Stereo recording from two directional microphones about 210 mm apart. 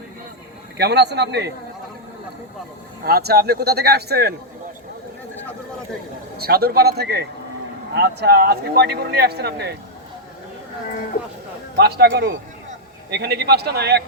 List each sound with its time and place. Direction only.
0.8 s speech: 50° right (ahead or behind)
3.0 s speech: 50° right (ahead or behind)
6.3 s speech: 45° right (ahead or behind)
11.8 s speech: 50° right (ahead or behind)